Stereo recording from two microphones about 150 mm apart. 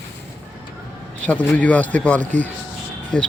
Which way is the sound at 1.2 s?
10° left (ahead or behind).